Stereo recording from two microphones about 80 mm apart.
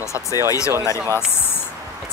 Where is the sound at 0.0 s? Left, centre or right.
Left.